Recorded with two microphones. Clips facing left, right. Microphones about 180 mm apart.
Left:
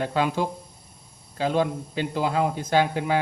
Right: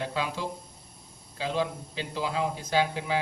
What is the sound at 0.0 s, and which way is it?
Speech, 55° left (ahead or behind).